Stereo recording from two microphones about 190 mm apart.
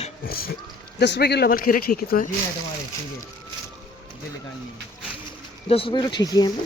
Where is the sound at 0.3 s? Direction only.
50° left (ahead or behind).